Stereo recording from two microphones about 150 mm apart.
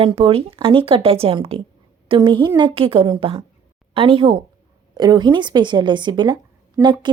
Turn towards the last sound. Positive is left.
turn(degrees=-30)  # may be behind; listen again after turning